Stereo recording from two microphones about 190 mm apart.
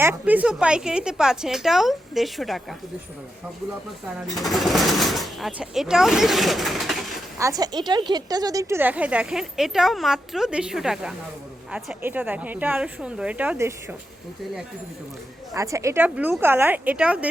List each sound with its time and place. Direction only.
0.0 s speech: 10° right (ahead or behind)
4.4 s speech: centre (ahead or behind)
7.3 s a woman's voice: 20° right (ahead or behind)
15.5 s a woman's voice: 15° right (ahead or behind)